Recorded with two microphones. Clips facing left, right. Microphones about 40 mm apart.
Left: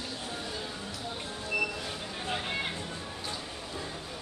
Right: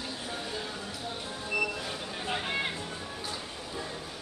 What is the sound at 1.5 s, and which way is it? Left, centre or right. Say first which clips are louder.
Music: right 1 dB; centre.